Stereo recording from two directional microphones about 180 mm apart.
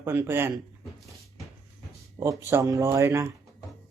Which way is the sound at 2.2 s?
15° right (ahead or behind).